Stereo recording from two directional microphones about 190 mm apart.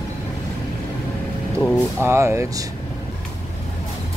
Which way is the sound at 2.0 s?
15° right (ahead or behind).